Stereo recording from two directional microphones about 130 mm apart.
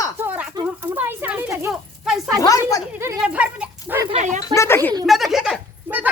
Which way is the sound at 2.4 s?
25° left (ahead or behind).